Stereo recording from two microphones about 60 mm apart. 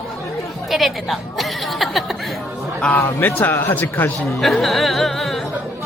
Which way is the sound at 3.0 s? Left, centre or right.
Left.